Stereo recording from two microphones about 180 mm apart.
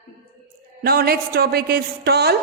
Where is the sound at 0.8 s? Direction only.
55° right (ahead or behind).